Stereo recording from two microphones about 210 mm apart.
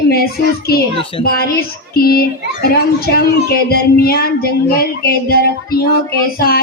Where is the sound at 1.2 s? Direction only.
45° left (ahead or behind).